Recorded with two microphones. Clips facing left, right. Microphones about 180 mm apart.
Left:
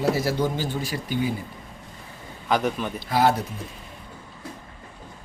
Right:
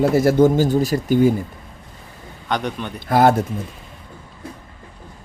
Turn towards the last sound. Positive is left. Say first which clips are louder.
# right 6 dB
turn(degrees=-50)  # may be behind; listen again after turning